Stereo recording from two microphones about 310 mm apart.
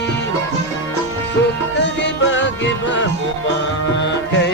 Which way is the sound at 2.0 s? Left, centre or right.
Left.